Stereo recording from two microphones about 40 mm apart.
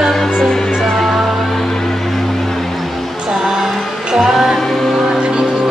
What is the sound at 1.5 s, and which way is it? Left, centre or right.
Music, centre.